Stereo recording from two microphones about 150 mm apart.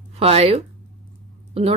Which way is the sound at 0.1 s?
45° right (ahead or behind).